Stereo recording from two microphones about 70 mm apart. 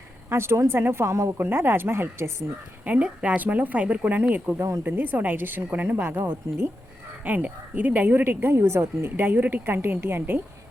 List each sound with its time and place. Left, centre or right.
0.3 s speech: right
1.4 s speech: right
2.8 s a woman's voice: centre
7.3 s a woman's voice: right